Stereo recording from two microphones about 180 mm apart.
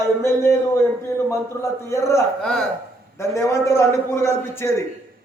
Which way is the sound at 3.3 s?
15° left (ahead or behind).